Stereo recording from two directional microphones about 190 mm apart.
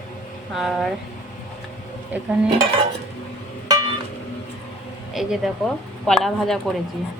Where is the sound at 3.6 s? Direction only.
20° right (ahead or behind).